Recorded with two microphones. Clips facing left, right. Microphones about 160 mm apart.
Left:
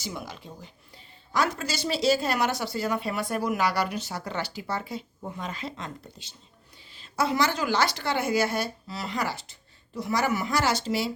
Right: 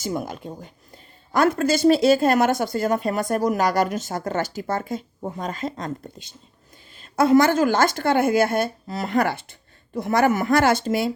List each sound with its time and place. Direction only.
0.0 s speech: 50° right (ahead or behind)